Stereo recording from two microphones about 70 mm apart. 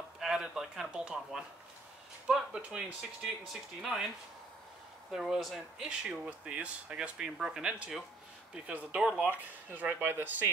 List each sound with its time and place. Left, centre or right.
0.2 s a sound: centre
2.2 s speech: centre
5.1 s speech: centre; by 10.5 s right